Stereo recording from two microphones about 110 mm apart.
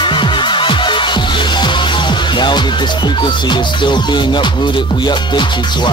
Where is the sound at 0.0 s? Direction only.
45° left (ahead or behind).